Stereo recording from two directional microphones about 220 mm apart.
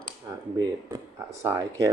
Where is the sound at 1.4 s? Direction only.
15° right (ahead or behind).